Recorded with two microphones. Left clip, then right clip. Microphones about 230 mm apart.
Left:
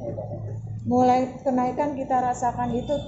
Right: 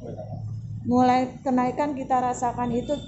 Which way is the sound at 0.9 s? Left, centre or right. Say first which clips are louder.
Left 1 dB; right.